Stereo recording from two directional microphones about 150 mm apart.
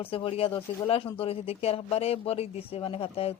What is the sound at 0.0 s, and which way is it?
Speech, 40° left (ahead or behind).